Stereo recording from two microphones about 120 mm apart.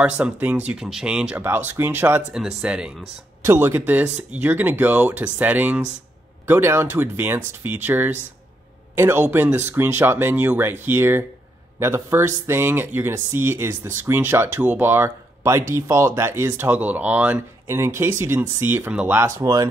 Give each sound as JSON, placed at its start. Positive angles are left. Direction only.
{"t": 0.2, "sound": "speech", "side_deg": -10}
{"t": 2.3, "sound": "speech", "side_deg": -5}
{"t": 3.4, "sound": "speech", "side_deg": -20}